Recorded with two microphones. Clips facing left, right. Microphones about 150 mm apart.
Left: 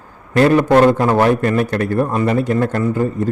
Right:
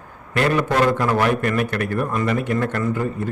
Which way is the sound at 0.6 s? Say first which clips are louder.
Left 7 dB; 50° left (ahead or behind).